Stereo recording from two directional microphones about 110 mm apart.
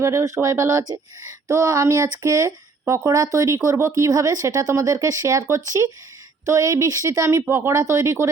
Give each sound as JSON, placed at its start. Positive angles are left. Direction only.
{"t": 0.0, "sound": "speech", "side_deg": -25}